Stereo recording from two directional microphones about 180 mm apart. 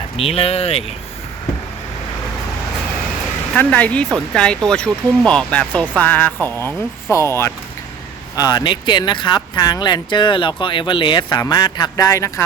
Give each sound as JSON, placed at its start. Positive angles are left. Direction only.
{"t": 0.2, "sound": "speech", "side_deg": 30}
{"t": 3.5, "sound": "speech", "side_deg": 10}